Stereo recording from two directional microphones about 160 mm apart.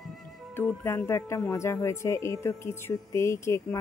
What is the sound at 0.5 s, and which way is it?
Speech, 15° left (ahead or behind).